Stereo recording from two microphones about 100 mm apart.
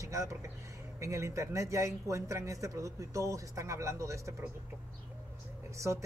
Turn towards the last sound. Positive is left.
turn(degrees=-30)  # may be behind; listen again after turning